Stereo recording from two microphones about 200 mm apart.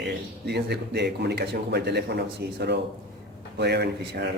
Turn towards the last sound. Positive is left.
turn(degrees=-55)  # may be behind; listen again after turning